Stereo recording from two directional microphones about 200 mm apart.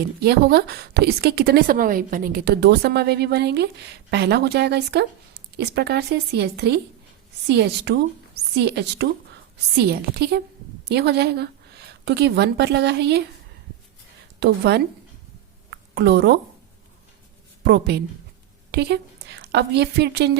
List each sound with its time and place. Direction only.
0.2 s a woman's voice: 50° right (ahead or behind)
14.3 s a woman's voice: 55° right (ahead or behind)
17.6 s a woman's voice: 55° right (ahead or behind)